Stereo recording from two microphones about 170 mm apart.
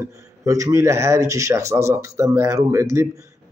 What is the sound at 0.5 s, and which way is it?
A man's voice, 20° right (ahead or behind).